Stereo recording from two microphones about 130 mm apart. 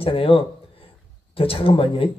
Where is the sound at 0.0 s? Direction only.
45° left (ahead or behind).